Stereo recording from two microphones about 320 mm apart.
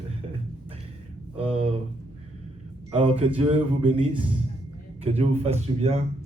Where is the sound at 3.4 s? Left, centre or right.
Centre.